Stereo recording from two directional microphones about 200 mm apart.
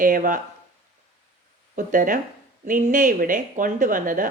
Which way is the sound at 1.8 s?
40° right (ahead or behind).